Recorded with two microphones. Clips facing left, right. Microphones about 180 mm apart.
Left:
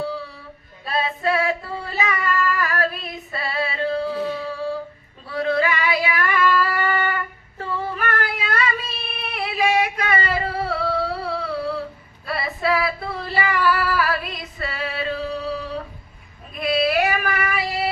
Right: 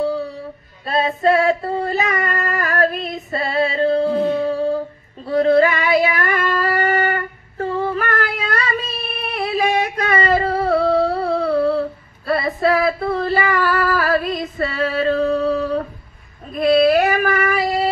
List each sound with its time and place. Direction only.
0.8 s music: 45° right (ahead or behind)
5.3 s singing: 40° right (ahead or behind)
9.3 s a sound: 40° right (ahead or behind)
12.3 s female singing: 45° right (ahead or behind)
16.5 s child singing: 45° right (ahead or behind)